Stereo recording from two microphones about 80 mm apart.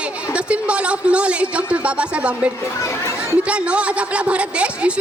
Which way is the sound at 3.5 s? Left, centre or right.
Centre.